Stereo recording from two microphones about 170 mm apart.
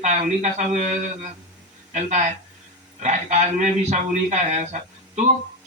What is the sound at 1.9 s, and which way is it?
Speech, 45° right (ahead or behind).